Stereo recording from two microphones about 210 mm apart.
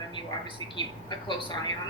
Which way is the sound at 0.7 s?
20° left (ahead or behind).